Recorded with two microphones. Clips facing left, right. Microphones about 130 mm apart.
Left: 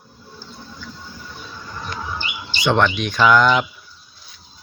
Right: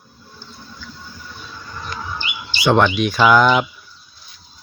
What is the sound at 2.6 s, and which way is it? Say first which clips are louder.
Speech: right 3 dB; 5° right (ahead or behind).